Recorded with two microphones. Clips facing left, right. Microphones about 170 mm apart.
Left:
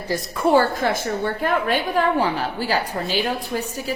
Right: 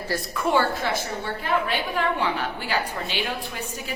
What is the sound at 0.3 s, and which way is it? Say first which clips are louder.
A woman's voice: left 6 dB; 35° left (ahead or behind).